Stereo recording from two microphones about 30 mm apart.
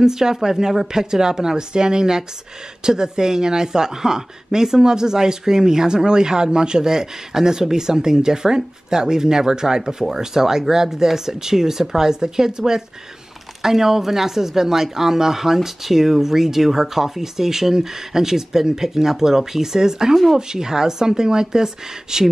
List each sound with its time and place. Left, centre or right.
0.0 s speech: centre